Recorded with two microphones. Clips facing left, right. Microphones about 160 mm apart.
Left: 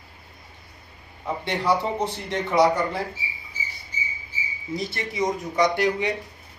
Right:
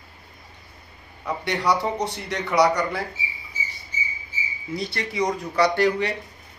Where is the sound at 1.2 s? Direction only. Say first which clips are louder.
Even; 25° left (ahead or behind).